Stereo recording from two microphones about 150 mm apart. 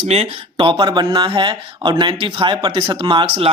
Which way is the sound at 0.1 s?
40° right (ahead or behind).